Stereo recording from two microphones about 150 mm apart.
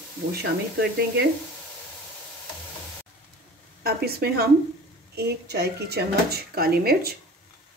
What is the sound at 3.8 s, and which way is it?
Speech, 90° right.